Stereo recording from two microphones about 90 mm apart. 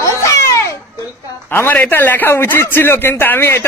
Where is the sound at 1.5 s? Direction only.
20° left (ahead or behind).